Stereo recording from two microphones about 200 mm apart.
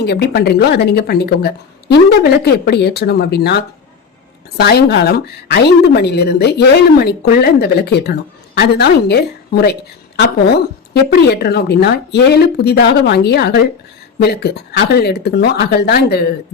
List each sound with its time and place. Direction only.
0.0 s speech: 55° left (ahead or behind)
4.6 s a woman's voice: 55° left (ahead or behind)